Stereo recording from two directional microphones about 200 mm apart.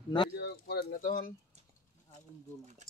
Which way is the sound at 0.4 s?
55° left (ahead or behind).